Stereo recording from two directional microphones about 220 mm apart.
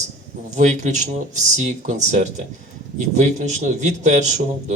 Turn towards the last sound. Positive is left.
turn(degrees=-30)  # may be behind; listen again after turning